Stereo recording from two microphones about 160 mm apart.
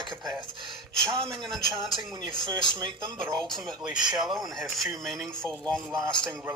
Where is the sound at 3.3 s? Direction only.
5° left (ahead or behind).